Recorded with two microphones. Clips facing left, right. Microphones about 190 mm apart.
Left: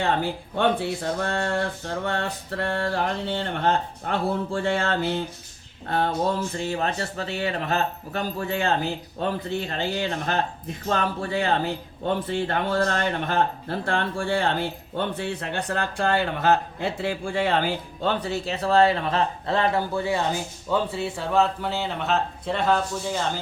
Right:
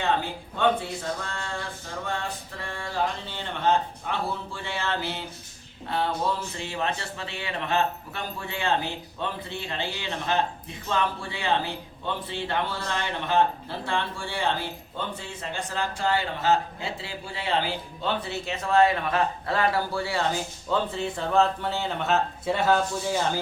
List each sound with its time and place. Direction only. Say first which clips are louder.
0.5 s a sound: left 1 dB; 60° left (ahead or behind)
3.4 s speech: right 2 dB; 55° left (ahead or behind); by 20.2 s 20° left (ahead or behind)
20.7 s speech: left 2 dB; 10° left (ahead or behind)